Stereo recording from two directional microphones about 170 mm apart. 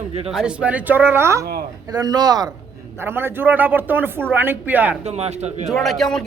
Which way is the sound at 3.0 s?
15° right (ahead or behind).